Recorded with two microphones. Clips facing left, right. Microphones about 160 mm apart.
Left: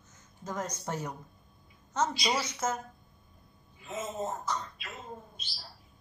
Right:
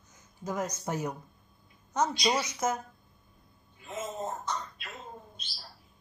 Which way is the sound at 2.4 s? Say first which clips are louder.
Right 2 dB; 10° right (ahead or behind).